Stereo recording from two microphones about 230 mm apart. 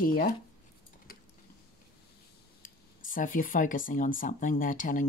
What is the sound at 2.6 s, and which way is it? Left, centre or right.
Speech, left.